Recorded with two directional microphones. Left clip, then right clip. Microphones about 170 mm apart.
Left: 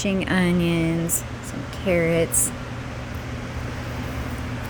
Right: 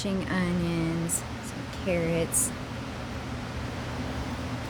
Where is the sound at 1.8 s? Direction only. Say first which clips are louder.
Left 7 dB; 20° left (ahead or behind).